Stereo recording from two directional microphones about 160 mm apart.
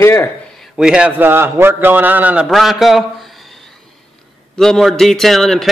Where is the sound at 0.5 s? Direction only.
Centre (ahead or behind).